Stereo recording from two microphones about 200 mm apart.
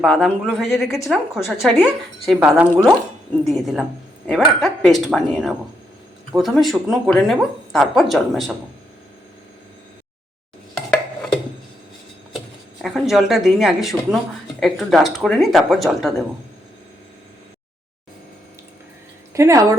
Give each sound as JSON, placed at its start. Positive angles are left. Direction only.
{"t": 0.0, "sound": "speech", "side_deg": 0}
{"t": 12.8, "sound": "speech", "side_deg": 0}
{"t": 19.3, "sound": "speech", "side_deg": -15}